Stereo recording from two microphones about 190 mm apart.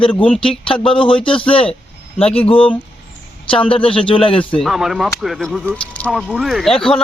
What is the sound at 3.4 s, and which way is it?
Speech, 25° left (ahead or behind).